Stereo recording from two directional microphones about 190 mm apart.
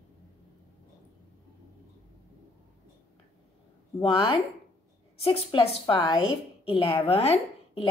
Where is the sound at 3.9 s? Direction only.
25° left (ahead or behind).